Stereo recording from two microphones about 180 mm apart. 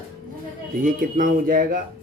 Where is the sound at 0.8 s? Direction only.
50° right (ahead or behind).